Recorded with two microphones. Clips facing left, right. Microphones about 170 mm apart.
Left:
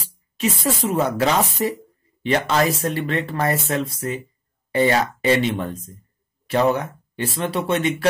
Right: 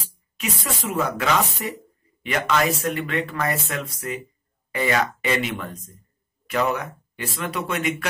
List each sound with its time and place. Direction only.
0.4 s speech: 35° left (ahead or behind)